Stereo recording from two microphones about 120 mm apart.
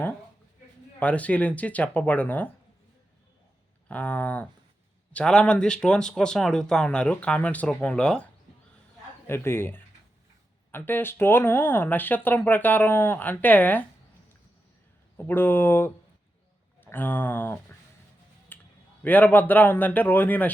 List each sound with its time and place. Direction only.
0.9 s speech: 10° left (ahead or behind)
3.8 s speech: 10° left (ahead or behind)
9.2 s speech: 20° left (ahead or behind)
15.2 s speech: 15° left (ahead or behind)
18.5 s a sound: 15° left (ahead or behind)
19.0 s speech: 15° left (ahead or behind)